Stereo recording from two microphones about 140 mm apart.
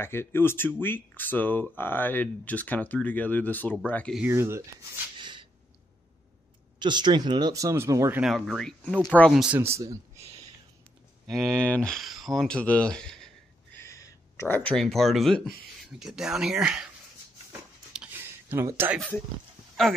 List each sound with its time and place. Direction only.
0.0 s speech: 15° left (ahead or behind)
4.3 s speech: 20° right (ahead or behind)
5.2 s a sound: 35° right (ahead or behind)
6.8 s speech: 35° right (ahead or behind)
8.2 s speech: centre (ahead or behind)
9.3 s speech: 5° right (ahead or behind)
9.6 s speech: 20° right (ahead or behind)
11.2 s speech: centre (ahead or behind)
13.7 s speech: 20° left (ahead or behind); by 16.9 s 5° right (ahead or behind)
17.5 s a sound: 10° right (ahead or behind)
18.9 s speech: 10° left (ahead or behind)